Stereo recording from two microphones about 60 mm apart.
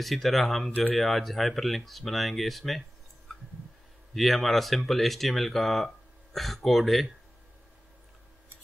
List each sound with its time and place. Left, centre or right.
0.0 s speech: centre
0.7 s speech: left
0.9 s speech: centre
3.3 s a sound: centre
4.1 s speech: centre